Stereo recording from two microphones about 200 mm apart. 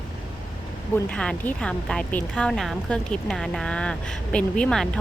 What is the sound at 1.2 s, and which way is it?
Speech, 5° left (ahead or behind).